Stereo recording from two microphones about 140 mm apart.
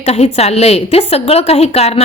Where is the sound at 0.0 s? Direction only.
50° left (ahead or behind).